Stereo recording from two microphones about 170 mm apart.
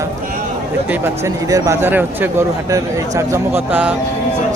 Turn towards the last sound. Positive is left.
turn(degrees=-10)  # may be behind; listen again after turning